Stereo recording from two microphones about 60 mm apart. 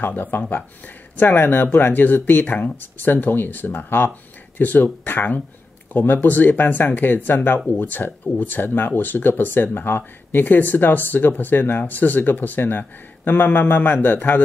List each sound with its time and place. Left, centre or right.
0.0 s speech: left